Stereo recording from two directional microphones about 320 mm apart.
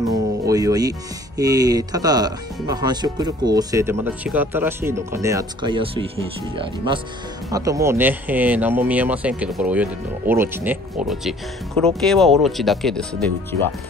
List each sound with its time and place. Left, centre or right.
0.1 s music: centre
1.4 s speech: centre